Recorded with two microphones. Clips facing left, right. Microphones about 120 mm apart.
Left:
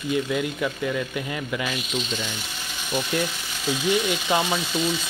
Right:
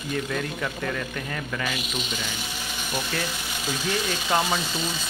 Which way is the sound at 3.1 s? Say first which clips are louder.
Left 6 dB; 15° left (ahead or behind).